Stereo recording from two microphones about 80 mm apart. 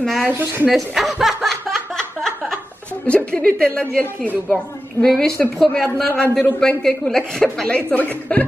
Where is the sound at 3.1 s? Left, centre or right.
Centre.